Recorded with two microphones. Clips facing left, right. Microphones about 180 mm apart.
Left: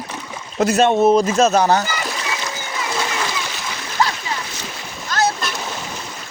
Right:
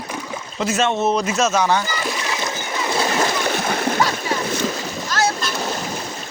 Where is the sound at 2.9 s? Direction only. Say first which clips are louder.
Right 5 dB; 40° right (ahead or behind).